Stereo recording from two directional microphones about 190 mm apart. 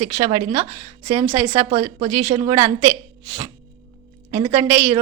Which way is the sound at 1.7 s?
30° right (ahead or behind).